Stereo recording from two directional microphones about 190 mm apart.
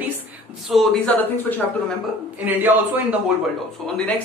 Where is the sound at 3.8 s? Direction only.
Centre (ahead or behind).